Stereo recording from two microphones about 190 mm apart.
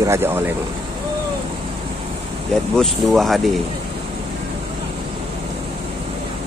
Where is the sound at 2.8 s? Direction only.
Centre (ahead or behind).